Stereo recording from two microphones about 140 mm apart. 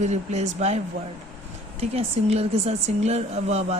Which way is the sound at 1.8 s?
50° right (ahead or behind).